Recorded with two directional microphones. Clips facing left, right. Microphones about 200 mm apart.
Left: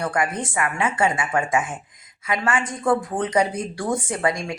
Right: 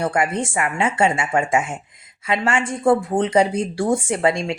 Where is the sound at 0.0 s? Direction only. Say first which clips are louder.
Right 3 dB; 25° right (ahead or behind).